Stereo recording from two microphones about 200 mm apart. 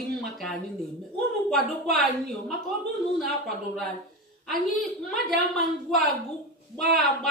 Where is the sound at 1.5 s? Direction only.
Centre (ahead or behind).